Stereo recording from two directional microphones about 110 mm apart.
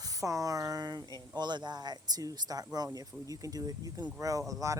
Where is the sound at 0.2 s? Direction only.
30° right (ahead or behind).